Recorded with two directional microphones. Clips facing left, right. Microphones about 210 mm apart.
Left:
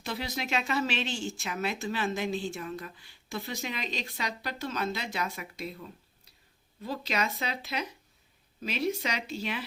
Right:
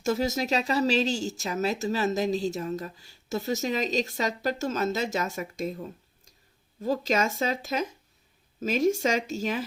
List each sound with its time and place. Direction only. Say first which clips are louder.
0.0 s speech: right 9 dB; 45° right (ahead or behind)